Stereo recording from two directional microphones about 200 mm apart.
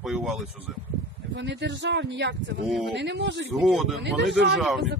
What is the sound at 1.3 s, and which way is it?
Speech, 60° right (ahead or behind).